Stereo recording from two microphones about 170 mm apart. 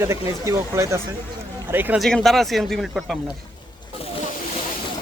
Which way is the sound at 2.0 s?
Centre (ahead or behind).